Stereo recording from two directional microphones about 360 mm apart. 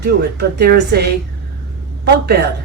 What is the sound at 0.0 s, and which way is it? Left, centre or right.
A woman's voice, right.